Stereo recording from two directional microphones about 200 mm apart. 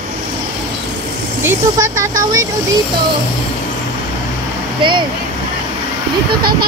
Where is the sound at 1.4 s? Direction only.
15° right (ahead or behind).